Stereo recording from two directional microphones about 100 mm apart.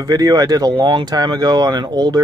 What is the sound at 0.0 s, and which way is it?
Speech, 40° right (ahead or behind).